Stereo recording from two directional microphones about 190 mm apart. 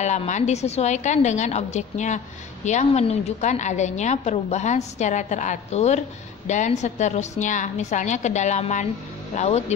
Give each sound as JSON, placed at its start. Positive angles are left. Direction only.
{"t": 0.0, "sound": "a woman's voice", "side_deg": 40}